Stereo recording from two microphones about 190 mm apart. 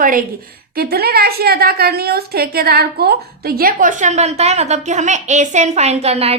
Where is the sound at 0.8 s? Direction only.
55° right (ahead or behind).